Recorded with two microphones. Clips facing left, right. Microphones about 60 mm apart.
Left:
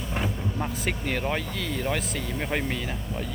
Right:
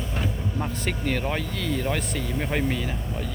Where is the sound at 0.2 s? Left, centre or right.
Centre.